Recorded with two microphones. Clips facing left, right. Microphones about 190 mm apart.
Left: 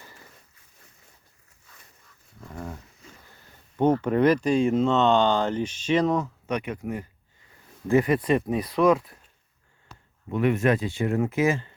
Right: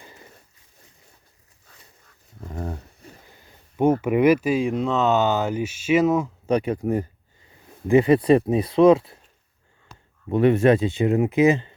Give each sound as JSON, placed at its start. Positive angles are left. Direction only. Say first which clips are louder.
{"t": 0.0, "sound": "a sound", "louder": "right 3 dB", "side_deg": -20}
{"t": 2.6, "sound": "a sound", "louder": "right 5 dB", "side_deg": -35}
{"t": 3.2, "sound": "speech", "louder": "right 2 dB", "side_deg": -10}
{"t": 6.5, "sound": "speech", "louder": "right 9 dB", "side_deg": -35}
{"t": 7.9, "sound": "speech", "louder": "right 5 dB", "side_deg": -25}
{"t": 10.2, "sound": "speech", "louder": "right 6 dB", "side_deg": -30}